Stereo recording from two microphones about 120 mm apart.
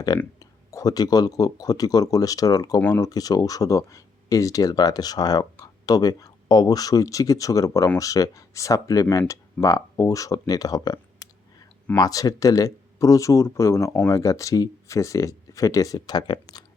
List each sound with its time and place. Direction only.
0.3 s speech: 30° left (ahead or behind)